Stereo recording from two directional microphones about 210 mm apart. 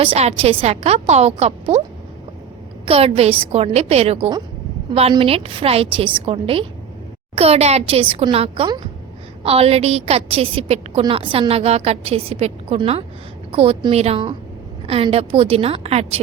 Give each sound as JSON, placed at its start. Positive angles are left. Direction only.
{"t": 0.0, "sound": "a woman's voice", "side_deg": -30}
{"t": 2.8, "sound": "a woman's voice", "side_deg": -30}